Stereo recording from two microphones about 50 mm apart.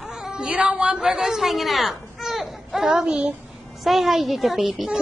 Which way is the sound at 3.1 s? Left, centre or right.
Right.